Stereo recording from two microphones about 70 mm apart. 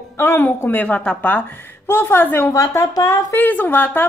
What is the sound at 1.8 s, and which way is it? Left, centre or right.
A woman's voice, left.